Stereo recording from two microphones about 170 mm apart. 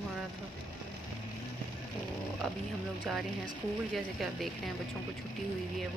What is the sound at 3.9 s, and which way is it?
Speech, centre (ahead or behind).